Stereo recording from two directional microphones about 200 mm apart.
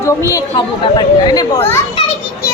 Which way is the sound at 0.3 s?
20° left (ahead or behind).